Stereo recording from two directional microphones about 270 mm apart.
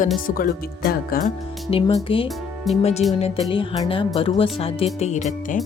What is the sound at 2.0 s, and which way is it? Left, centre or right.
Speech, centre.